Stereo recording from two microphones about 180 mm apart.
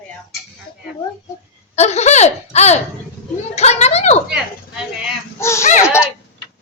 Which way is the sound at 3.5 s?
35° left (ahead or behind).